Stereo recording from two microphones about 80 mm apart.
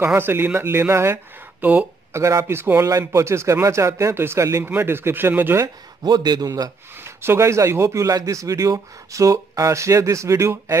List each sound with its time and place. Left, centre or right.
0.2 s a man's voice: right
1.6 s speech: right
2.1 s a man's voice: right
4.6 s speech: right
6.0 s a man's voice: right
7.0 s a man's voice: right